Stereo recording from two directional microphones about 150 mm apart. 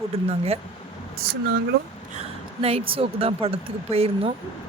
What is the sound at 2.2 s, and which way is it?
Speech, 45° right (ahead or behind).